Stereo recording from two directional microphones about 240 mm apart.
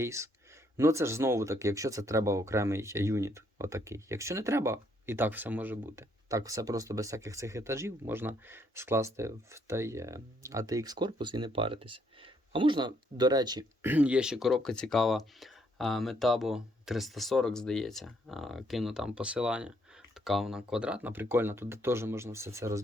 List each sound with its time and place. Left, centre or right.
0.0 s speech: centre